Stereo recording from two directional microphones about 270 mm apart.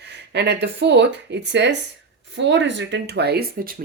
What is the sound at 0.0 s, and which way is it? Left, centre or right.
Speech, right.